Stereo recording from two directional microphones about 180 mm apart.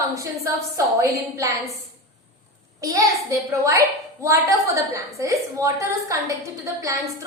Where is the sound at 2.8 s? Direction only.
20° right (ahead or behind).